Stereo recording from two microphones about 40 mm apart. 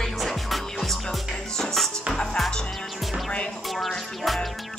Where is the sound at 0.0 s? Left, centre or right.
Centre.